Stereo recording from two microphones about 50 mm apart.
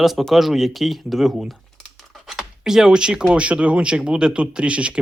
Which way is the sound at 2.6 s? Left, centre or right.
Centre.